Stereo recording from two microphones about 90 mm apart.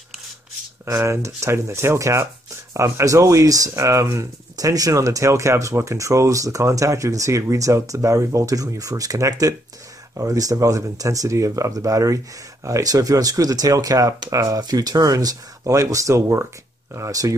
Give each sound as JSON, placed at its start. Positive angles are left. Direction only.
{"t": 0.8, "sound": "speech", "side_deg": -35}